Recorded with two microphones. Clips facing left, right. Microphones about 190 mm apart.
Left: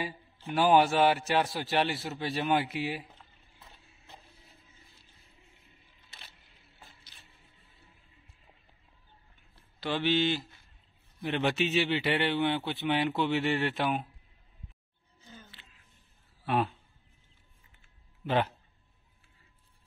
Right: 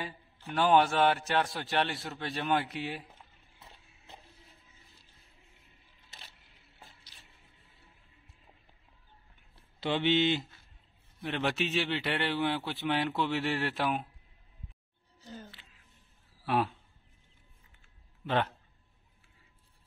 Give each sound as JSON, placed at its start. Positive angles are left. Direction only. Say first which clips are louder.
{"t": 0.5, "sound": "a man's voice", "louder": "left 2 dB", "side_deg": 5}
{"t": 9.8, "sound": "speech", "louder": "right 1 dB", "side_deg": -20}
{"t": 11.1, "sound": "a man's voice", "louder": "left 3 dB", "side_deg": 0}
{"t": 15.1, "sound": "a sound", "louder": "right 6 dB", "side_deg": -40}
{"t": 16.4, "sound": "speech", "louder": "left 1 dB", "side_deg": 0}
{"t": 18.2, "sound": "a man's voice", "louder": "left 2 dB", "side_deg": 5}